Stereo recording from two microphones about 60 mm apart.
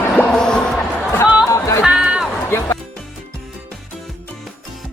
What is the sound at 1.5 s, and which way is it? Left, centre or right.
Music, left.